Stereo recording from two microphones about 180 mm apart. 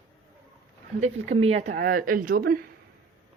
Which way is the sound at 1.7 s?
50° right (ahead or behind).